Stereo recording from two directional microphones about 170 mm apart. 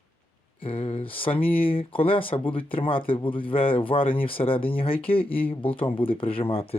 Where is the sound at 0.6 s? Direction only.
35° left (ahead or behind).